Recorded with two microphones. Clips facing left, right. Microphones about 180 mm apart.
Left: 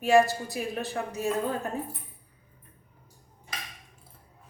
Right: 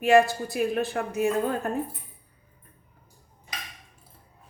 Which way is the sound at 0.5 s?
60° right (ahead or behind).